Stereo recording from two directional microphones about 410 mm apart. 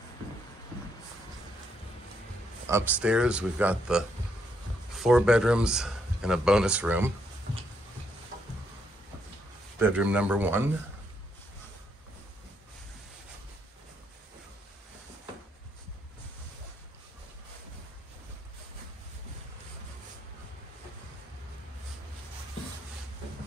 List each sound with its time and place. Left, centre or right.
2.6 s speech: centre
9.8 s speech: centre